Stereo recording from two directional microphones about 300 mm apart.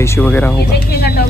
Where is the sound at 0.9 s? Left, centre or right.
Left.